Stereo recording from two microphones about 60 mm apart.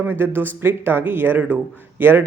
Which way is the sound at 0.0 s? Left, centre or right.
Right.